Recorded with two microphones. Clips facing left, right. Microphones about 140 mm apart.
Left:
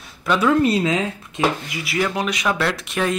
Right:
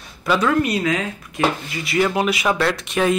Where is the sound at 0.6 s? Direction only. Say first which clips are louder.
Left 3 dB; 25° left (ahead or behind).